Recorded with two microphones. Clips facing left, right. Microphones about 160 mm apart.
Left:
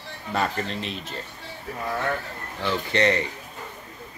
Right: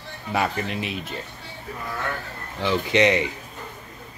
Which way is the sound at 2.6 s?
15° right (ahead or behind).